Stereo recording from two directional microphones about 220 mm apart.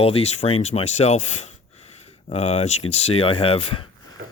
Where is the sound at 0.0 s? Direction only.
30° left (ahead or behind).